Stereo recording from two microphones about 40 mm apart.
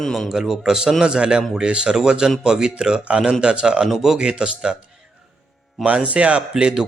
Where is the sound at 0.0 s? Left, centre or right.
Centre.